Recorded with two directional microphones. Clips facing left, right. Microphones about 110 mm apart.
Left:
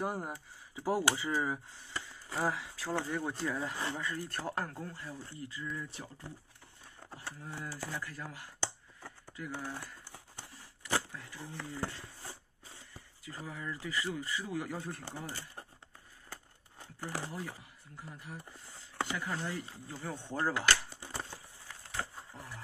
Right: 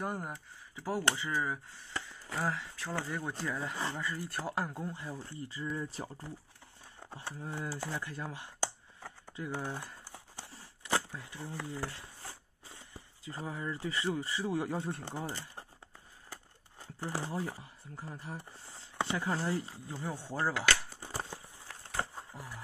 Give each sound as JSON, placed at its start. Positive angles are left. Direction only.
{"t": 0.0, "sound": "speech", "side_deg": 5}
{"t": 4.8, "sound": "speech", "side_deg": -20}
{"t": 7.0, "sound": "speech", "side_deg": -20}
{"t": 9.0, "sound": "a sound", "side_deg": -20}
{"t": 12.6, "sound": "speech", "side_deg": -20}
{"t": 17.0, "sound": "speech", "side_deg": -30}
{"t": 19.9, "sound": "speech", "side_deg": -15}
{"t": 22.3, "sound": "a sound", "side_deg": -5}